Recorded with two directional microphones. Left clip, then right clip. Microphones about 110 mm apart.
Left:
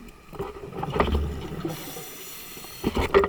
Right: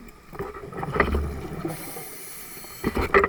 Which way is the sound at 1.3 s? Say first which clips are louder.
Right 1 dB; 15° left (ahead or behind).